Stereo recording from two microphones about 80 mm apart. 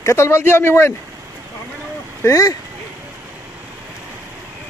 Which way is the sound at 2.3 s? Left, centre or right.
Left.